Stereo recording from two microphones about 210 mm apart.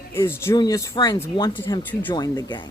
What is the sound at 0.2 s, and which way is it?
A woman's voice, 15° left (ahead or behind).